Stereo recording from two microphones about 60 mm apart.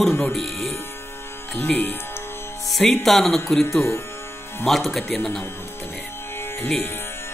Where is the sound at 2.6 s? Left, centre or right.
Centre.